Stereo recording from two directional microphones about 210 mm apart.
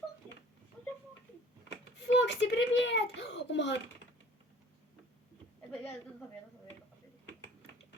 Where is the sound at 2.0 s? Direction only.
55° left (ahead or behind).